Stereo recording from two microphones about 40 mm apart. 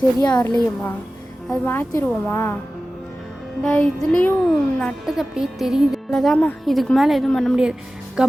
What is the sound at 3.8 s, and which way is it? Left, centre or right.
Speech, centre.